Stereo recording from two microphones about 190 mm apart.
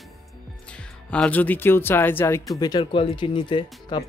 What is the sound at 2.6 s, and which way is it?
Speech, 25° left (ahead or behind).